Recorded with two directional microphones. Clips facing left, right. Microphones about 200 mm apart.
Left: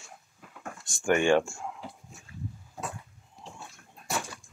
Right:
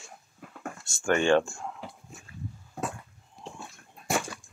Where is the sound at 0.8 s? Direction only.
15° left (ahead or behind).